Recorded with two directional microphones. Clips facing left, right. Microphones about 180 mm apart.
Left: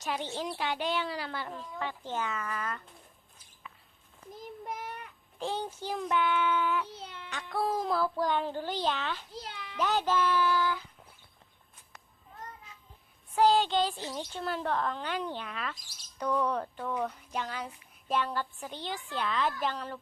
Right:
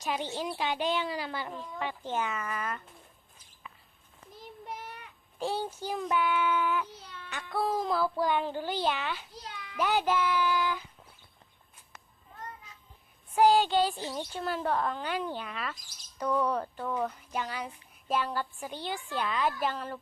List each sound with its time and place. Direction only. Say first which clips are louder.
0.0 s speech: right 1 dB; 15° right (ahead or behind)
4.6 s child singing: left 2 dB; 50° left (ahead or behind)
5.4 s speech: right 2 dB; 10° right (ahead or behind)
6.8 s a sound: left 4 dB; 30° left (ahead or behind)
7.5 s speech: right 1 dB; centre (ahead or behind)
9.3 s a sound: left 2 dB; 30° left (ahead or behind)
9.7 s speech: right 1 dB; 10° right (ahead or behind)
13.3 s speech: right 2 dB; 15° right (ahead or behind)